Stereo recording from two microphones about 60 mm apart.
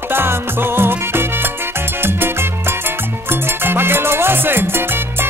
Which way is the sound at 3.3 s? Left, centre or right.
Right.